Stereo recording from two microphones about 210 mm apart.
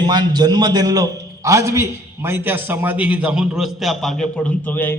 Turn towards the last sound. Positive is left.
turn(degrees=10)  # may be behind; listen again after turning